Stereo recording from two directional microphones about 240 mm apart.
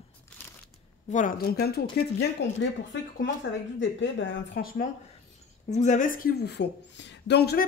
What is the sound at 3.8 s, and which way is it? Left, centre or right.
Speech, left.